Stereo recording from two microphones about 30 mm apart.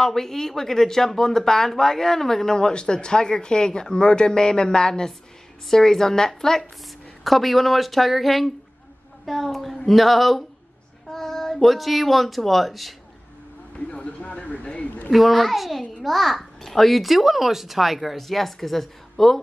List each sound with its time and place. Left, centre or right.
0.0 s a woman's voice: centre
7.2 s a child's voice: centre
11.1 s child singing: centre
11.6 s a child's voice: centre
13.7 s speech: left
14.4 s a sound: left
15.1 s a child's voice: centre